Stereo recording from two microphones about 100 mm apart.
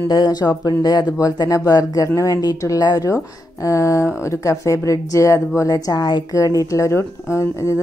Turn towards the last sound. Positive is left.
turn(degrees=30)  # may be behind; listen again after turning